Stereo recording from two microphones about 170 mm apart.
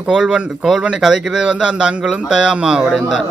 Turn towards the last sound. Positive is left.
turn(degrees=-5)  # may be behind; listen again after turning